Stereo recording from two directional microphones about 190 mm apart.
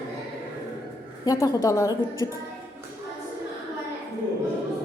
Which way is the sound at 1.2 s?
20° left (ahead or behind).